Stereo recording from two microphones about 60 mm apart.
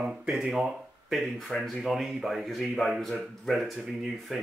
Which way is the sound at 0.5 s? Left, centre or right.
Centre.